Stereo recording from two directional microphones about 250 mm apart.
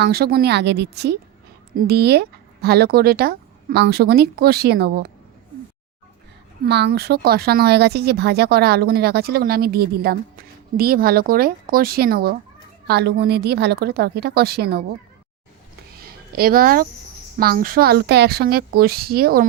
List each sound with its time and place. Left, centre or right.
0.0 s speech: right
6.7 s speech: right
16.3 s speech: right